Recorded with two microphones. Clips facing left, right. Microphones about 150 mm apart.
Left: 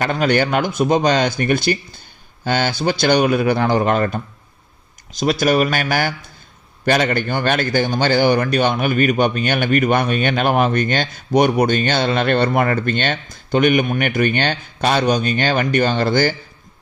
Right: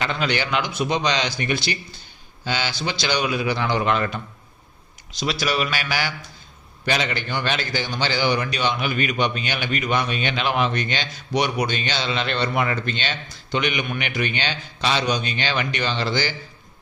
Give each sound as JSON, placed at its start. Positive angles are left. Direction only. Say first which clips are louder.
{"t": 0.0, "sound": "a man's voice", "louder": "left 7 dB", "side_deg": 45}